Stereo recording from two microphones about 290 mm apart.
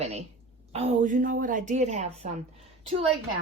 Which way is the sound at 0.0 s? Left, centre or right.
Right.